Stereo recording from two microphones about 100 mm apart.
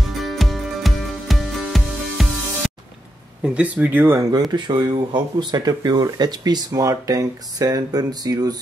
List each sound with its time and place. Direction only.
0.2 s music: centre (ahead or behind)
3.4 s speech: 10° right (ahead or behind)
4.3 s speech: 45° right (ahead or behind)